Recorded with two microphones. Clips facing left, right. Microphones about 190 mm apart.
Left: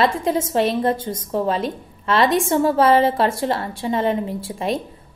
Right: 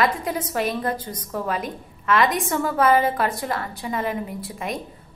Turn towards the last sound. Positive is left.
turn(degrees=30)  # may be behind; listen again after turning